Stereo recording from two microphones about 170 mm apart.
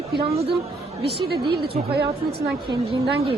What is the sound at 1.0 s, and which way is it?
A woman's voice, 70° right (ahead or behind).